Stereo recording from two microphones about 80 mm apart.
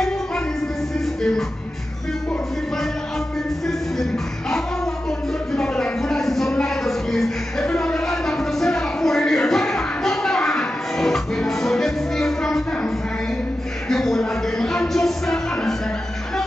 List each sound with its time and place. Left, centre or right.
3.6 s music: centre
5.5 s a sound: centre
13.8 s music: centre